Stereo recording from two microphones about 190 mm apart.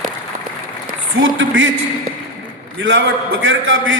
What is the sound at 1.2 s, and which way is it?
Speech, 90° right.